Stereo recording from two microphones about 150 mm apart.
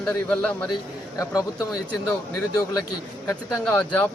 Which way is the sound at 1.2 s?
20° left (ahead or behind).